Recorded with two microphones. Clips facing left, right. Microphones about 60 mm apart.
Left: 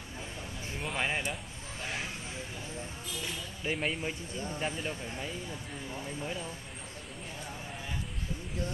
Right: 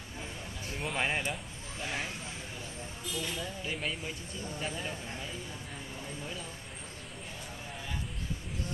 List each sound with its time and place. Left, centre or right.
0.7 s speech: centre
3.6 s speech: left